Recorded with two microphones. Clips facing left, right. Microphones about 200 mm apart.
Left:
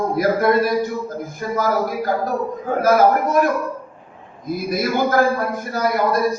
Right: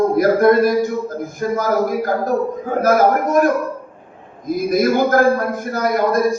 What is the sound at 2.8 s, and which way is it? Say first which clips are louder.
Speech: even; 45° right (ahead or behind).